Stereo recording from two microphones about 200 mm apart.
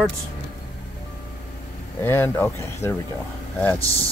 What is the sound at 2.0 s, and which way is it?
Speech, 10° left (ahead or behind).